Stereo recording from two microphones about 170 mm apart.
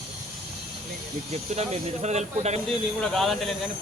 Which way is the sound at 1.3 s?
40° right (ahead or behind).